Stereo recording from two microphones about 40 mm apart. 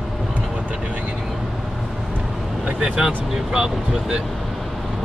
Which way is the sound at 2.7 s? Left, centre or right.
Right.